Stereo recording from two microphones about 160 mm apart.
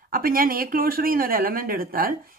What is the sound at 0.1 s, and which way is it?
A woman's voice, 65° right (ahead or behind).